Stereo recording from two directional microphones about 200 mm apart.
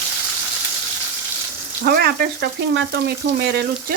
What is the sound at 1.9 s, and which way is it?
Frying, 50° right (ahead or behind).